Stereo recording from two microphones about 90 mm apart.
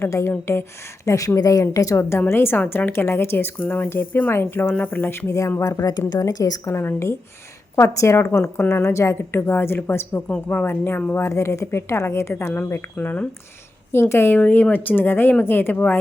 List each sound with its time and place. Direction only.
0.0 s a woman's voice: 30° left (ahead or behind)
5.6 s a woman's voice: 40° left (ahead or behind)
6.7 s a woman's voice: 30° left (ahead or behind)
10.2 s a woman's voice: 15° left (ahead or behind)